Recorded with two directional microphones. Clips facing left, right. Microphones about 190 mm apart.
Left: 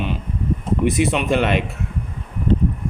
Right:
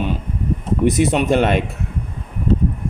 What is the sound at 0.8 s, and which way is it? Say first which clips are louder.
Speech: right 4 dB; 40° right (ahead or behind).